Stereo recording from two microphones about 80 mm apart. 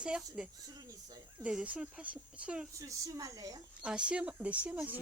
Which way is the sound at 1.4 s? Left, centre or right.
Centre.